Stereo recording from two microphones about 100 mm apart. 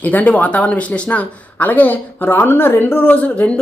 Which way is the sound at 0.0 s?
15° left (ahead or behind).